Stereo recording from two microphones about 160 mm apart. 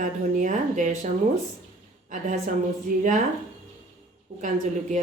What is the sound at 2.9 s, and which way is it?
Speech, 60° right (ahead or behind).